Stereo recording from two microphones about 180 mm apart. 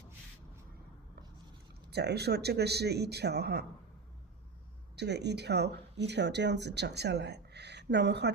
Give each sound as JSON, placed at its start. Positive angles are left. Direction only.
{"t": 1.9, "sound": "a man's voice", "side_deg": -65}
{"t": 4.9, "sound": "speech", "side_deg": -70}